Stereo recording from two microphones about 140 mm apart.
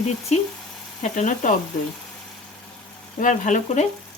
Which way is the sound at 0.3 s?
55° left (ahead or behind).